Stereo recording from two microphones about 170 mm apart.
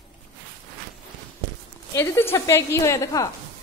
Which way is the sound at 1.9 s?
15° left (ahead or behind).